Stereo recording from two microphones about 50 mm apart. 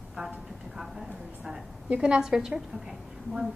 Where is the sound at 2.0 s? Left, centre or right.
Centre.